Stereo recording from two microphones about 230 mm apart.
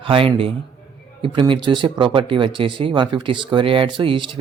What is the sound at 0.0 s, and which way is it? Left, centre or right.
Speech, right.